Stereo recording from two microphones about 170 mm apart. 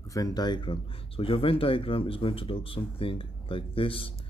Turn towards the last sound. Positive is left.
turn(degrees=30)  # may be behind; listen again after turning